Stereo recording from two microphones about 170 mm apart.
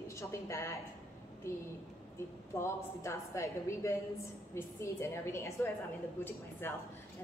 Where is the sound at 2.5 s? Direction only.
15° left (ahead or behind).